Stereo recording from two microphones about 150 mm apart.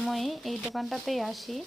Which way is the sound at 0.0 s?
Centre (ahead or behind).